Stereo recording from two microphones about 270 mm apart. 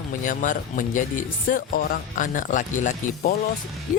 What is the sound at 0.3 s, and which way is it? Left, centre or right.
Speech, left.